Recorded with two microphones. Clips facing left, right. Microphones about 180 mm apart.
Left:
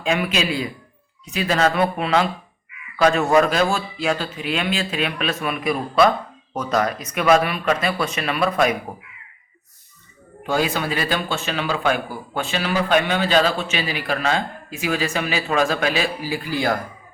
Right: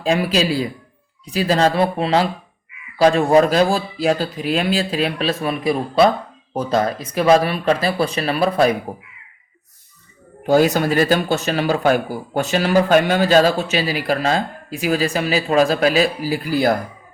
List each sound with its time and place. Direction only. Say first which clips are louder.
0.0 s speech: right 4 dB; 35° right (ahead or behind)
10.4 s speech: right 7 dB; 40° right (ahead or behind)